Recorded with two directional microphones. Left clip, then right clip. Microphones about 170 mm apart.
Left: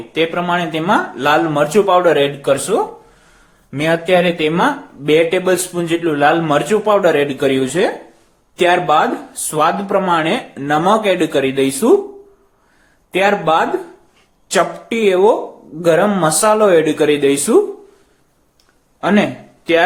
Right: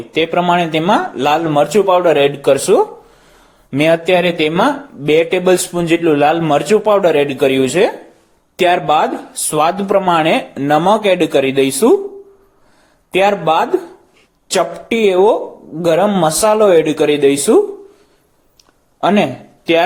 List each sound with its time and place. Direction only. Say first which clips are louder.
0.1 s speech: right 3 dB; 25° right (ahead or behind)
13.1 s speech: right 1 dB; 30° right (ahead or behind)
18.9 s speech: right 2 dB; 30° right (ahead or behind)